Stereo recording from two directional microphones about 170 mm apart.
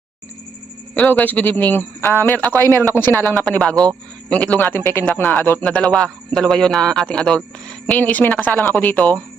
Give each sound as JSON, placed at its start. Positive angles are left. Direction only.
{"t": 0.9, "sound": "a man's voice", "side_deg": 10}
{"t": 2.6, "sound": "speech", "side_deg": -20}
{"t": 3.0, "sound": "a man's voice", "side_deg": 15}